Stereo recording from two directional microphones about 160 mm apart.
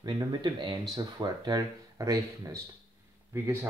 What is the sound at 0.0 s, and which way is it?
Speech, 30° right (ahead or behind).